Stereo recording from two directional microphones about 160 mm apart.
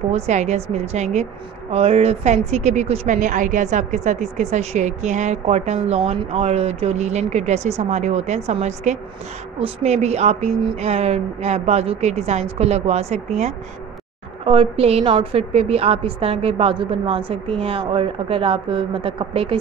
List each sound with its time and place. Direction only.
0.1 s a woman's voice: 45° right (ahead or behind)
14.4 s a woman's voice: 35° right (ahead or behind)